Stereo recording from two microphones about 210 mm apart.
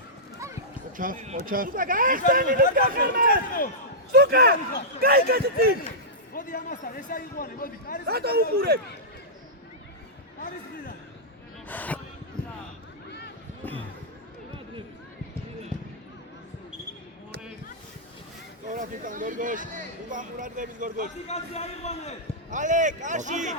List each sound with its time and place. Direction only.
0.9 s speech: 40° right (ahead or behind)
3.2 s a man's voice: 40° left (ahead or behind)
4.1 s speech: 45° right (ahead or behind)
6.3 s a man's voice: 40° left (ahead or behind)
8.0 s speech: 50° right (ahead or behind)
11.7 s speech: 10° left (ahead or behind)
13.1 s a sound: 50° left (ahead or behind)
18.7 s speech: 40° right (ahead or behind)
21.2 s a man's voice: 30° left (ahead or behind)
22.4 s speech: 35° right (ahead or behind)